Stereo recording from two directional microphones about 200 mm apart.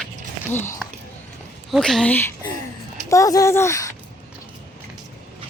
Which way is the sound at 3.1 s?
15° left (ahead or behind).